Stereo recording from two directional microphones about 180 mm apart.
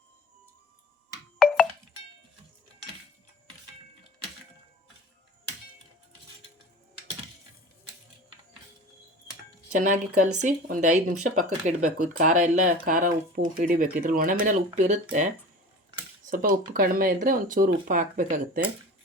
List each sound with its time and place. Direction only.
9.7 s speech: 45° right (ahead or behind)
16.3 s speech: 50° right (ahead or behind)